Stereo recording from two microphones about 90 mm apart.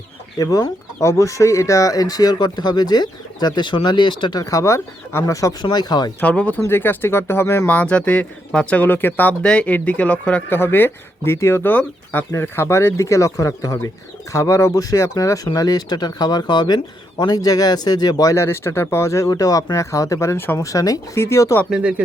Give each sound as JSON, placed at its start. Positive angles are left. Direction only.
{"t": 0.3, "sound": "speech", "side_deg": 40}
{"t": 4.4, "sound": "speech", "side_deg": 40}
{"t": 5.6, "sound": "speech", "side_deg": 50}
{"t": 6.1, "sound": "speech", "side_deg": 15}
{"t": 9.4, "sound": "speech", "side_deg": 10}
{"t": 18.4, "sound": "speech", "side_deg": 30}
{"t": 20.7, "sound": "speech", "side_deg": 40}
{"t": 21.7, "sound": "speech", "side_deg": -15}